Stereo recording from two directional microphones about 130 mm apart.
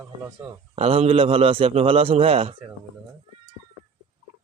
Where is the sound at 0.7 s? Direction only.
50° right (ahead or behind).